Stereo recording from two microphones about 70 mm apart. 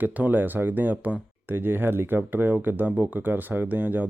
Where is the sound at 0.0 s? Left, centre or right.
Right.